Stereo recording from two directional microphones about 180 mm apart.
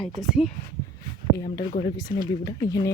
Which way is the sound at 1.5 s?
20° left (ahead or behind).